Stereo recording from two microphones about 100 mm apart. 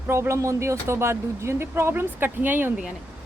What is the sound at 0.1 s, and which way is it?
Speech, 30° right (ahead or behind).